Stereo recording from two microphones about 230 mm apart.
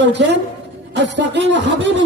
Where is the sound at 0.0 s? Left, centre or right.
Right.